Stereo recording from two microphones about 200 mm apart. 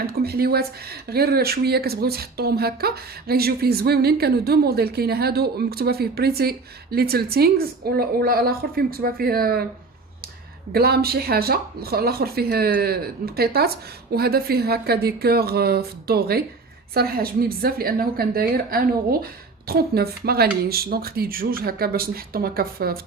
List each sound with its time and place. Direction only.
0.1 s speech: 50° right (ahead or behind)
10.7 s speech: 50° right (ahead or behind)